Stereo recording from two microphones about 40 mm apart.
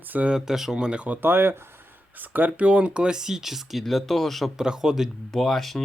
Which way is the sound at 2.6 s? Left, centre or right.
Right.